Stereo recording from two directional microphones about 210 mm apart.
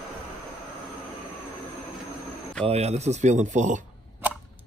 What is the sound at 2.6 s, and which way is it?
Speech, 30° right (ahead or behind).